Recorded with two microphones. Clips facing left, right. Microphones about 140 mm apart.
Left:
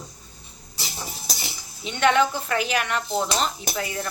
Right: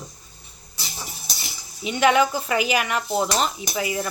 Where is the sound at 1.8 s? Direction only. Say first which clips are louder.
Right 2 dB; 10° right (ahead or behind).